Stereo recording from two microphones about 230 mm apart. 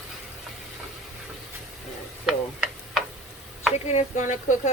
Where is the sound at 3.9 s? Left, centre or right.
Left.